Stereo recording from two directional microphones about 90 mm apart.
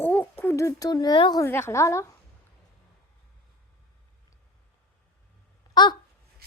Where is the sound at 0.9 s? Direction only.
50° left (ahead or behind).